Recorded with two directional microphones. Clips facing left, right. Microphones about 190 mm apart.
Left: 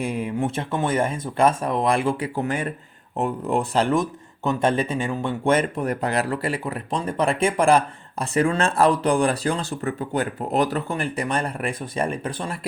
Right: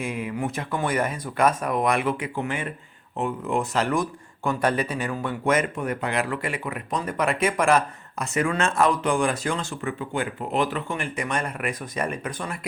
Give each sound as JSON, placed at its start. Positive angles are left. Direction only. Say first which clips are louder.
{"t": 0.0, "sound": "speech", "louder": "left 3 dB", "side_deg": 30}